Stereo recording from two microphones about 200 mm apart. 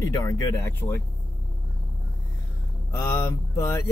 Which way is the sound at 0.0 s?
15° left (ahead or behind).